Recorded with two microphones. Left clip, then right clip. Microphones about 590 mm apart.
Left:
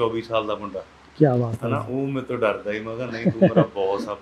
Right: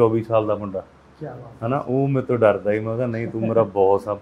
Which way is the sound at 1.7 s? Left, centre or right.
Right.